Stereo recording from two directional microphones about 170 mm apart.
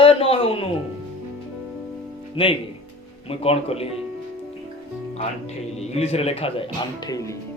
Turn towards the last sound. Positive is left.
turn(degrees=20)  # may be behind; listen again after turning